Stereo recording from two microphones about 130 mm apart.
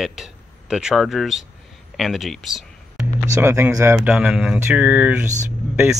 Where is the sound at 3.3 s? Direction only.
15° right (ahead or behind).